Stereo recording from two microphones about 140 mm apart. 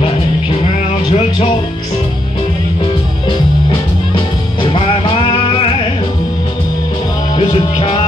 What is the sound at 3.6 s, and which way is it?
Music, 35° left (ahead or behind).